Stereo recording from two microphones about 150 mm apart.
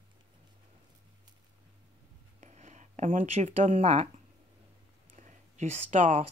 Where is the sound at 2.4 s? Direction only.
50° right (ahead or behind).